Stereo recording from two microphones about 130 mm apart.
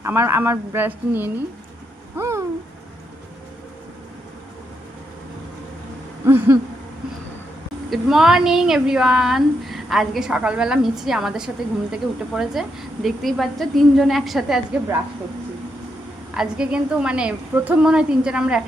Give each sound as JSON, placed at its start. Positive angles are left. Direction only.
{"t": 0.0, "sound": "a woman's voice", "side_deg": -15}
{"t": 2.1, "sound": "owl", "side_deg": -20}
{"t": 6.2, "sound": "a sound", "side_deg": -20}
{"t": 7.9, "sound": "a woman's voice", "side_deg": 0}
{"t": 16.3, "sound": "a woman's voice", "side_deg": -5}